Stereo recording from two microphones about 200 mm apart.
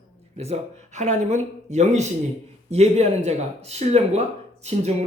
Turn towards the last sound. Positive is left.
turn(degrees=-35)  # may be behind; listen again after turning